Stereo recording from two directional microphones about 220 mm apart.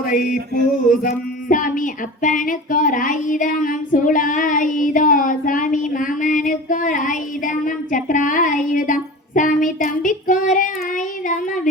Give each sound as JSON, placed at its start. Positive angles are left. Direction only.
{"t": 0.9, "sound": "music", "side_deg": 40}